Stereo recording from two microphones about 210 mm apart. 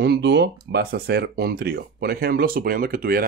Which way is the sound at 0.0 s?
55° right (ahead or behind).